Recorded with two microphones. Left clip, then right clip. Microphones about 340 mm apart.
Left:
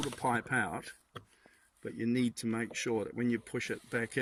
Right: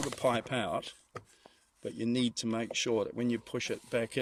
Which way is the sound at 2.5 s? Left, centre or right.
Right.